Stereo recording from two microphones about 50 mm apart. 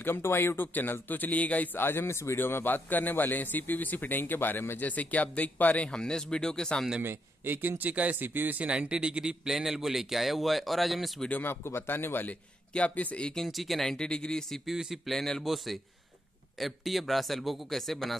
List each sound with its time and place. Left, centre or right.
0.0 s a man's voice: left
1.8 s a man's voice: left
4.7 s a man's voice: left
5.9 s speech: centre
7.0 s speech: right
8.2 s speech: right
8.6 s speech: right; by 11.1 s centre
11.4 s a man's voice: left
12.7 s speech: left
13.2 s speech: centre
13.5 s speech: centre
13.9 s speech: centre
14.7 s speech: centre
15.1 s speech: centre